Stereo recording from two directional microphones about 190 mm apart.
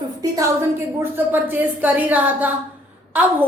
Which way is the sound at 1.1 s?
10° right (ahead or behind).